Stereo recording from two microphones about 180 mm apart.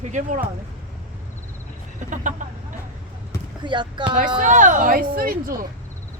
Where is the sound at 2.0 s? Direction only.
45° right (ahead or behind).